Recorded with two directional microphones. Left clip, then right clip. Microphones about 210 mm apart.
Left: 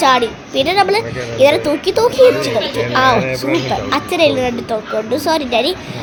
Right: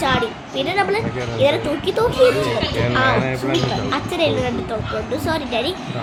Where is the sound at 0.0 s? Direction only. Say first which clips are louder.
Left 7 dB; 40° left (ahead or behind).